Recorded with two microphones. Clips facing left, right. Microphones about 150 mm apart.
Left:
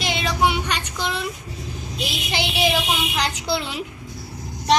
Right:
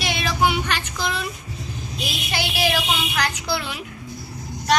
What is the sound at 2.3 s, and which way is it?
A woman's voice, 20° left (ahead or behind).